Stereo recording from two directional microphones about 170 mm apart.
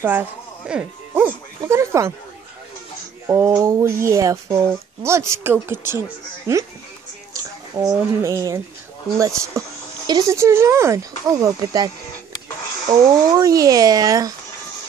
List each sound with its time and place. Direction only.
0.0 s speech: 10° right (ahead or behind)
3.3 s speech: 15° right (ahead or behind)
9.6 s speech: 20° right (ahead or behind)
12.9 s speech: 20° right (ahead or behind)